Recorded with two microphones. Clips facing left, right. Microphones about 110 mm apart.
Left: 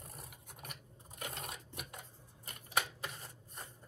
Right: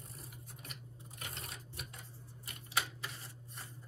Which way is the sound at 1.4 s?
60° left (ahead or behind).